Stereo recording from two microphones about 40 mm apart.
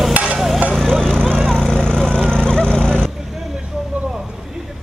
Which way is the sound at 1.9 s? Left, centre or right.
Left.